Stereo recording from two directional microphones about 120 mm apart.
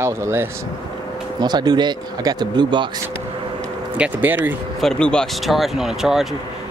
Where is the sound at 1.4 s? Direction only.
35° right (ahead or behind).